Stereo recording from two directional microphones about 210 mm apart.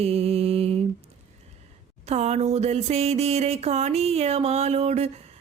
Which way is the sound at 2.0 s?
30° right (ahead or behind).